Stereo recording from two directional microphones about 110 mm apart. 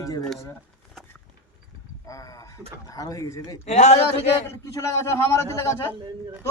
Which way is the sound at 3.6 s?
90° left.